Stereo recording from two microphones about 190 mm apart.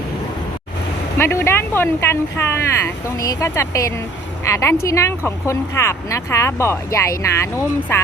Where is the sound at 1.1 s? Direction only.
10° left (ahead or behind).